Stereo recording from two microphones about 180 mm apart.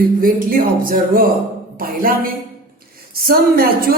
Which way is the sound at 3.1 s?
55° right (ahead or behind).